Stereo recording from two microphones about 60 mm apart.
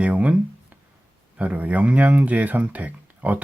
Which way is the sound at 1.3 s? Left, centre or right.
Right.